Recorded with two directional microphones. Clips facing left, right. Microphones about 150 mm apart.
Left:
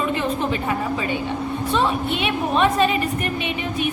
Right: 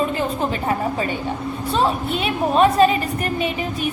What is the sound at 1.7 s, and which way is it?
A woman's voice, 35° right (ahead or behind).